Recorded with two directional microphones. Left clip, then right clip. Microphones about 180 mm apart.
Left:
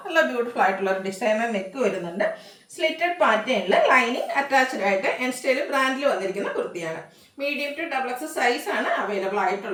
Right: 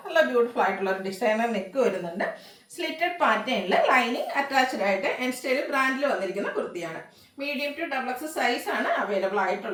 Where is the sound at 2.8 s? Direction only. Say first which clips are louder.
Left 4 dB; 15° left (ahead or behind).